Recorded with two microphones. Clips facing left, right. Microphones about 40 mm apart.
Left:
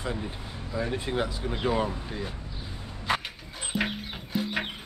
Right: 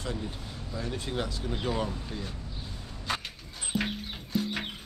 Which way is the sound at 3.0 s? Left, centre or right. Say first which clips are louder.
Left 5 dB; centre.